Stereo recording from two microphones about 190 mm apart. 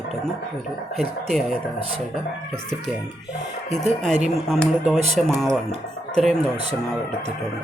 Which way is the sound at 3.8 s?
35° right (ahead or behind).